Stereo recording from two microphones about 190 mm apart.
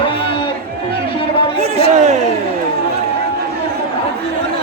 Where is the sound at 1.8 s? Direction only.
40° right (ahead or behind).